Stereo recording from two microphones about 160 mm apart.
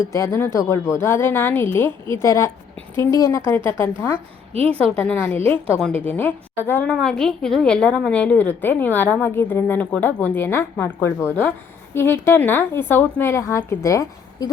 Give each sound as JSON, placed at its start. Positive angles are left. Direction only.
{"t": 0.0, "sound": "a woman's voice", "side_deg": 20}